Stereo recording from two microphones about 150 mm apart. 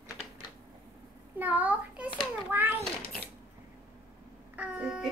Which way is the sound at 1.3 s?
10° right (ahead or behind).